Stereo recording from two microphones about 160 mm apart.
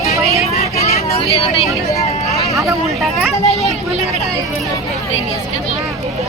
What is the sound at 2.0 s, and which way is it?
Vehicle, 45° left (ahead or behind).